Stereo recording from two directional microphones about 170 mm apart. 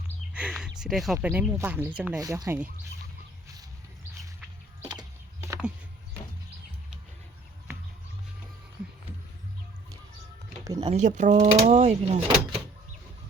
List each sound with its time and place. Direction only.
0.3 s speech: 5° right (ahead or behind)
4.8 s a sound: 25° right (ahead or behind)
7.7 s music: 15° right (ahead or behind)
10.8 s speech: 40° right (ahead or behind)